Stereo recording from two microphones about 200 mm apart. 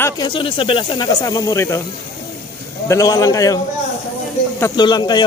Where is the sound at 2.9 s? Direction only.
15° left (ahead or behind).